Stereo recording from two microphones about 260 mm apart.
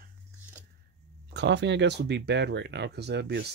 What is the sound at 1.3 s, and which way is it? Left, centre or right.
Speech, right.